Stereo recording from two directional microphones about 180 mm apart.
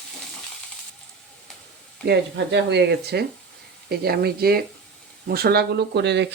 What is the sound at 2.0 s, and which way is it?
Speech, 70° right (ahead or behind).